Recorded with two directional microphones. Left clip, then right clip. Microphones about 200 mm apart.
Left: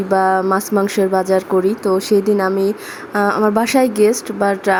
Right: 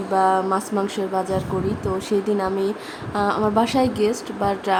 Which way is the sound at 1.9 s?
20° right (ahead or behind).